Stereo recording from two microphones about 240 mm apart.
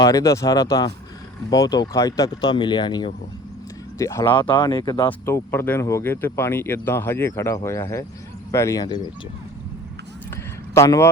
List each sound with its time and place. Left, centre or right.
0.0 s speech: centre
10.8 s speech: centre